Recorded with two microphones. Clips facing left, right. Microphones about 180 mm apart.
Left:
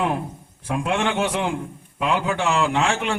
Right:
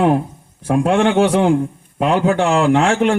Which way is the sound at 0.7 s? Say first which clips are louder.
Right 9 dB; 50° right (ahead or behind).